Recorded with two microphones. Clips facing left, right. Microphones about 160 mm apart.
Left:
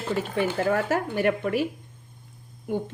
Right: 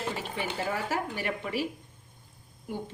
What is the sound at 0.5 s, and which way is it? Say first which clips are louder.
Speech: left 6 dB; 55° left (ahead or behind).